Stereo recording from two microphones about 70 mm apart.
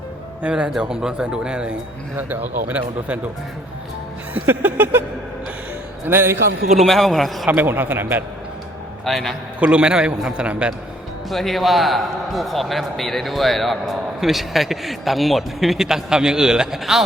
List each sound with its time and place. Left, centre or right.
0.4 s a man's voice: centre
2.1 s a man's voice: right
4.4 s a man's voice: right
6.1 s a man's voice: right
6.7 s a man's voice: centre
7.5 s a man's voice: right
9.0 s a man's voice: centre
9.6 s a man's voice: centre
11.3 s a man's voice: centre